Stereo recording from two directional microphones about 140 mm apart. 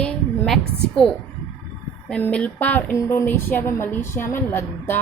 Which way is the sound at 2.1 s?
10° left (ahead or behind).